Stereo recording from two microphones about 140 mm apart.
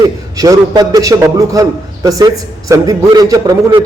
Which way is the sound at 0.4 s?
25° right (ahead or behind).